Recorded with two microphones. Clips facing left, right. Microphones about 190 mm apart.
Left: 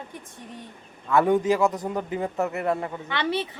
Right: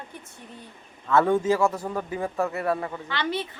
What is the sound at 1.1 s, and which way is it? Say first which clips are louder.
A man's voice: left 1 dB; 15° left (ahead or behind).